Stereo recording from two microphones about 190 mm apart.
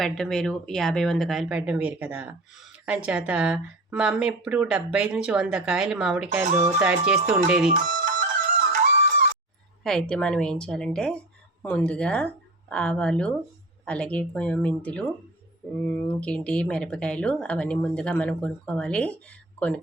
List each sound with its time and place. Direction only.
0.0 s speech: centre (ahead or behind)
6.4 s speech: 40° right (ahead or behind)
6.8 s speech: 5° right (ahead or behind)
7.7 s music: 45° right (ahead or behind)
9.8 s speech: 5° left (ahead or behind)